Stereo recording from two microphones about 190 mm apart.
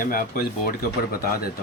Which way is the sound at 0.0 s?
45° left (ahead or behind).